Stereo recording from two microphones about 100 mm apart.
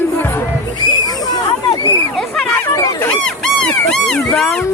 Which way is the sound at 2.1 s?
5° left (ahead or behind).